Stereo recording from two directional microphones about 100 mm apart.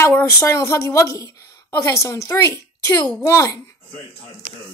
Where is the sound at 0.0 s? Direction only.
20° left (ahead or behind).